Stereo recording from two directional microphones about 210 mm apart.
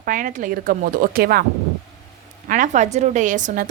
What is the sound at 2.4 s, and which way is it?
A woman's voice, 40° right (ahead or behind).